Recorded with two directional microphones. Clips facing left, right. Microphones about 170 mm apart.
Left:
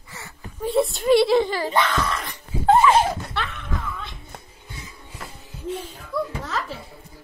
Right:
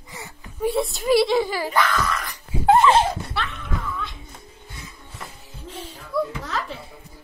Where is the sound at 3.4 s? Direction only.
5° right (ahead or behind).